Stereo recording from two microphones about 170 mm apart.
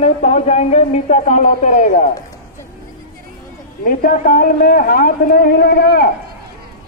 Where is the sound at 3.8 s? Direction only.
60° left (ahead or behind).